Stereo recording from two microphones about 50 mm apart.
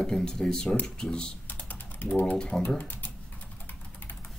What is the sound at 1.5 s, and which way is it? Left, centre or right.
Typing, left.